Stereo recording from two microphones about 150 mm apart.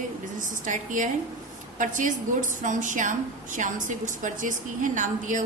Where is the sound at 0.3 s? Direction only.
60° right (ahead or behind).